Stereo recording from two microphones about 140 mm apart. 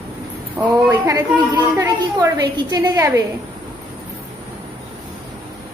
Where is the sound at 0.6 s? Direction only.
20° right (ahead or behind).